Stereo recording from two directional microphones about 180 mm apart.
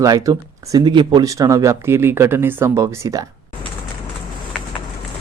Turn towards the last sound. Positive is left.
turn(degrees=-15)  # may be behind; listen again after turning